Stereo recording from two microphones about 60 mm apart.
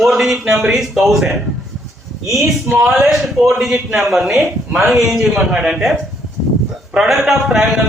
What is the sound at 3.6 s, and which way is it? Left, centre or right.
A man's voice, centre.